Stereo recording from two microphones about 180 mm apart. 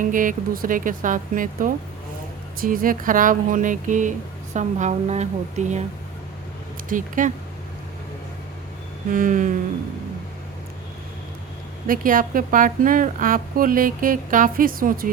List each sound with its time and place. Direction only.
0.0 s a woman's voice: 50° right (ahead or behind)
6.8 s a woman's voice: 45° right (ahead or behind)
9.0 s a woman's voice: 50° right (ahead or behind)
11.9 s a woman's voice: 50° right (ahead or behind)